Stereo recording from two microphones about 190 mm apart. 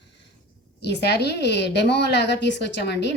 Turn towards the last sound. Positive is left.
turn(degrees=65)  # may be behind; listen again after turning